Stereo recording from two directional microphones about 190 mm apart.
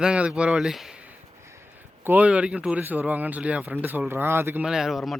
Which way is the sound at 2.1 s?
5° right (ahead or behind).